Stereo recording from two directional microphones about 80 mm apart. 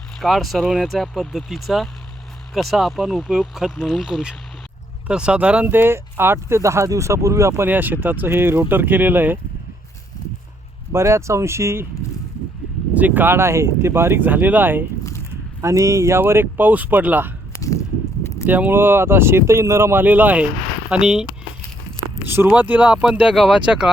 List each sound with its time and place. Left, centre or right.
0.2 s speech: centre
5.7 s speech: right
7.7 s speech: right
10.9 s speech: right
13.0 s speech: right
15.6 s speech: right
17.6 s a sound: left
18.4 s speech: right
20.9 s speech: centre
22.3 s speech: right
23.3 s speech: centre